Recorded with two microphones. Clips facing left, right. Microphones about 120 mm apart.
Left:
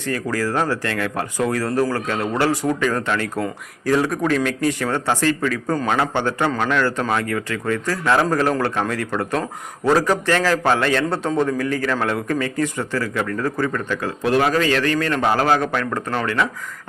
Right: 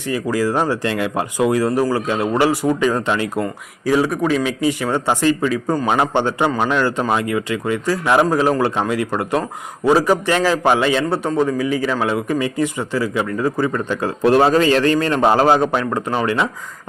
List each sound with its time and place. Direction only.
0.0 s a man's voice: 10° right (ahead or behind)
3.4 s a man's voice: 5° right (ahead or behind)